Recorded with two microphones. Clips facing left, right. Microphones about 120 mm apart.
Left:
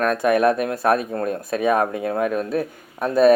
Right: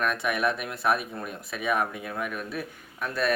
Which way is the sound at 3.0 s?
40° left (ahead or behind).